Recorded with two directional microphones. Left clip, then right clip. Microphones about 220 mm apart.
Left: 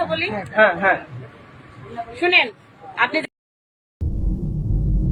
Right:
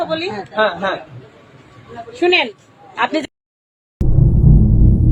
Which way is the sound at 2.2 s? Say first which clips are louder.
Right 2 dB; 60° right (ahead or behind).